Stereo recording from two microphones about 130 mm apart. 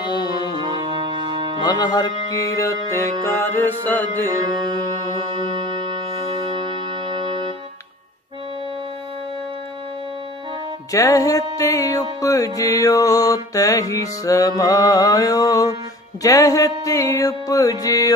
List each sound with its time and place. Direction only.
0.0 s music: 35° left (ahead or behind)
0.6 s music: 35° right (ahead or behind)
1.6 s music: 30° left (ahead or behind); by 4.0 s 15° left (ahead or behind)
5.4 s music: 40° right (ahead or behind)
10.9 s music: 25° left (ahead or behind)